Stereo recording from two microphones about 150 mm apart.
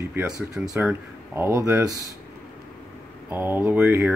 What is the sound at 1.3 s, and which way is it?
Speech, 15° right (ahead or behind).